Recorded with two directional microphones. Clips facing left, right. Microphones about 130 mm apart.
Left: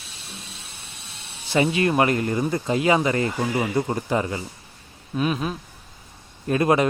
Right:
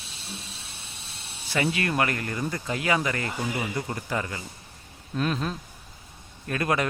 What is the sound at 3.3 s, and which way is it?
Speech, 40° left (ahead or behind).